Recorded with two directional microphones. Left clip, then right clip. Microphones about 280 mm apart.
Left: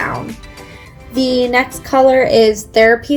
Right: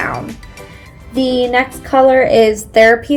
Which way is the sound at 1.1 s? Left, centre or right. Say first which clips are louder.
Even; centre.